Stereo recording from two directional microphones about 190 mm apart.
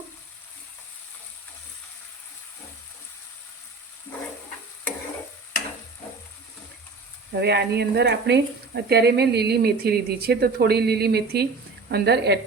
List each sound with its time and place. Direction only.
7.3 s speech: 60° right (ahead or behind)